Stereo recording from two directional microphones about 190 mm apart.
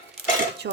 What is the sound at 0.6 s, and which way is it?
Cutlery, 60° right (ahead or behind).